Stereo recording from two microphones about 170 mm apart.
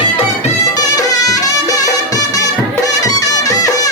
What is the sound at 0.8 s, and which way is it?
Music, 20° left (ahead or behind).